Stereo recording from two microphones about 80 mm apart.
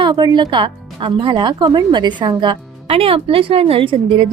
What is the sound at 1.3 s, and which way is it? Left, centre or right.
Speech, right.